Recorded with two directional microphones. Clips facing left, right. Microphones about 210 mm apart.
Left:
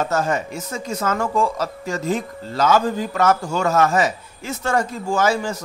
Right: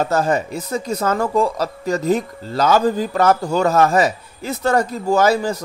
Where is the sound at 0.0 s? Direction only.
35° right (ahead or behind).